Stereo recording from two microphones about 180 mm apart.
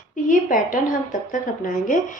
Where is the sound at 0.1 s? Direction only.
45° left (ahead or behind).